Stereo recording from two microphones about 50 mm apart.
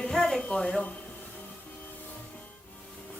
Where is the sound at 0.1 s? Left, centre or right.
Centre.